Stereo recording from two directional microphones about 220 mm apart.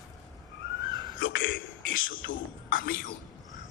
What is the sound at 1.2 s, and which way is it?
Speech, 60° left (ahead or behind).